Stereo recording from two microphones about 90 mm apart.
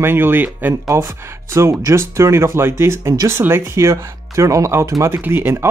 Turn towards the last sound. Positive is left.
turn(degrees=-25)  # may be behind; listen again after turning